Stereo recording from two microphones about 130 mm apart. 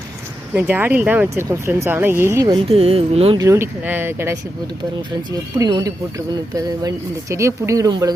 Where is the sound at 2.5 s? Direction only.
45° right (ahead or behind).